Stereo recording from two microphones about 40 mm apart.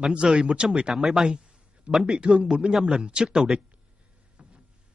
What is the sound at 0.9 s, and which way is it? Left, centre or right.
Speech, centre.